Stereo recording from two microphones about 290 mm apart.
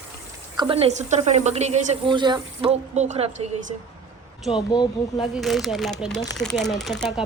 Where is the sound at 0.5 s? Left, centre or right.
Centre.